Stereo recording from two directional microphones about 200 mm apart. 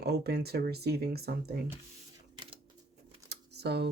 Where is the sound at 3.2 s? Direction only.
55° right (ahead or behind).